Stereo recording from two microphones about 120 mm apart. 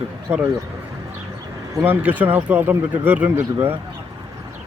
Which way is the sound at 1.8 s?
15° right (ahead or behind).